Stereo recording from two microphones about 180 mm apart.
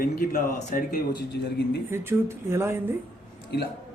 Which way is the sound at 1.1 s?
70° left (ahead or behind).